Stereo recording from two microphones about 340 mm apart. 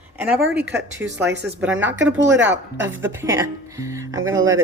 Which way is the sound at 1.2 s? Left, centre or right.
Right.